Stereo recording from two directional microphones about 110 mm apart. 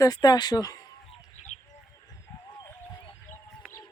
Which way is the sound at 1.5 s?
85° left.